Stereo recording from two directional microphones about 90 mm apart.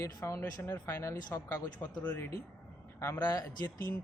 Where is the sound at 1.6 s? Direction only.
45° left (ahead or behind).